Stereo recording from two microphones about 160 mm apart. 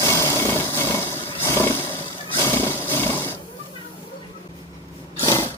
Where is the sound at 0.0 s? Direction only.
15° left (ahead or behind).